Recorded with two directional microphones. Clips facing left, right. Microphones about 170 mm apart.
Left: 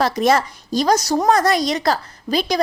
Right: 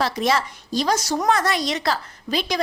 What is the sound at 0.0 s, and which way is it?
A woman's voice, 45° left (ahead or behind).